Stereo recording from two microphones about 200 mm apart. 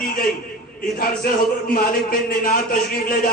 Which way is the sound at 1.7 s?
45° left (ahead or behind).